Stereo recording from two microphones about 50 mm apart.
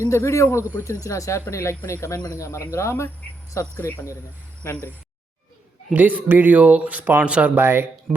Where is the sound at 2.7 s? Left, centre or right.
Left.